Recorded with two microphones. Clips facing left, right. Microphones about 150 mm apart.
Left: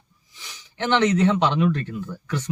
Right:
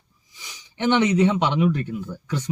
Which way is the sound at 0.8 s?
15° right (ahead or behind).